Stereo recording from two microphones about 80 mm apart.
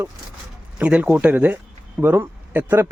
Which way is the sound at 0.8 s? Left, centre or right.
Centre.